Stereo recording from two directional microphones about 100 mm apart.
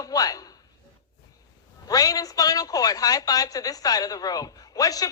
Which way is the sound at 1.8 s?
35° left (ahead or behind).